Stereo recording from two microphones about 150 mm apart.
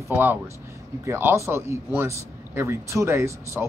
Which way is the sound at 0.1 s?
15° right (ahead or behind).